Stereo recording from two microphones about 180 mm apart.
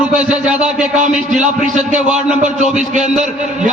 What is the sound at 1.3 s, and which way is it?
A man's voice, 45° right (ahead or behind).